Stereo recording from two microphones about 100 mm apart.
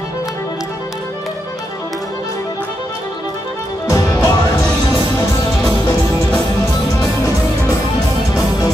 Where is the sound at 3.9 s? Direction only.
35° left (ahead or behind).